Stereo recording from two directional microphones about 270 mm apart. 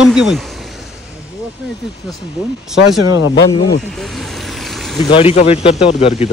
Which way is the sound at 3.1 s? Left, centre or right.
Left.